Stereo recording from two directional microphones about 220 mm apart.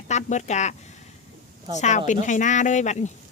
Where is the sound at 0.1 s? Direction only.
35° left (ahead or behind).